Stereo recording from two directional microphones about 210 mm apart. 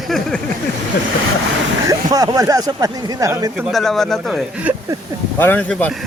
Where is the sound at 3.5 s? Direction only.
Centre (ahead or behind).